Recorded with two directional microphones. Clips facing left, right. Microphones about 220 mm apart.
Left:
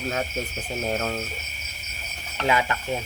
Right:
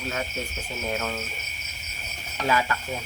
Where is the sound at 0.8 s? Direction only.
35° left (ahead or behind).